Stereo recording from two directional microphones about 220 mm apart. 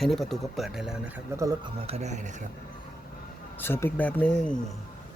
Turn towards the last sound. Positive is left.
turn(degrees=5)  # may be behind; listen again after turning